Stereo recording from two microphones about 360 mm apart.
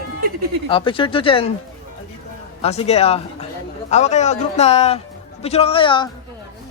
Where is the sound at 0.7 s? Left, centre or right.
Centre.